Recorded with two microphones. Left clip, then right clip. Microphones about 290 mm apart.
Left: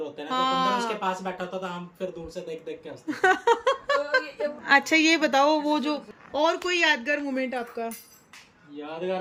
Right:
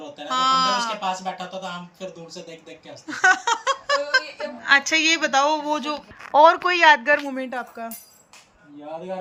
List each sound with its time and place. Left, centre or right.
0.3 s a woman's voice: centre